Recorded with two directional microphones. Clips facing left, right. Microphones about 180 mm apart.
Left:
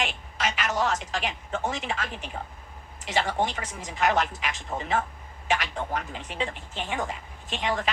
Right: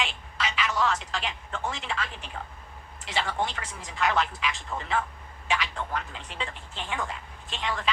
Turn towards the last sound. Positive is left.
turn(degrees=50)  # may be behind; listen again after turning